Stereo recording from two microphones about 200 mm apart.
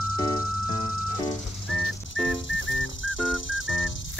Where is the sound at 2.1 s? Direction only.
70° left (ahead or behind).